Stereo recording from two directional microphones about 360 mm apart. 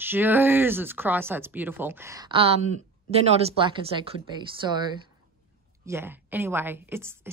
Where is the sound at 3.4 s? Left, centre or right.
Centre.